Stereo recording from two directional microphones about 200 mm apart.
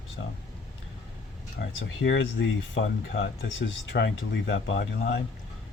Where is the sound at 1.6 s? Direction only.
65° left (ahead or behind).